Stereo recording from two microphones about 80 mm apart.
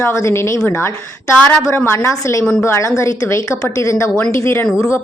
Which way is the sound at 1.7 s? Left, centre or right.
Left.